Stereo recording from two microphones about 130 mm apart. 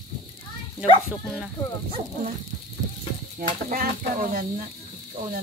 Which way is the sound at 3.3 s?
90° right.